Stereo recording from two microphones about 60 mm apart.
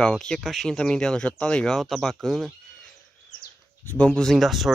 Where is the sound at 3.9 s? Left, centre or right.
Centre.